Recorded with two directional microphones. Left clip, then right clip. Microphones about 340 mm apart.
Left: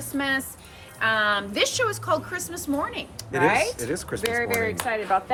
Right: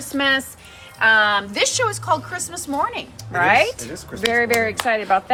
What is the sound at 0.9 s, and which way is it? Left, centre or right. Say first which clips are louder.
A woman's voice: right 7 dB; centre.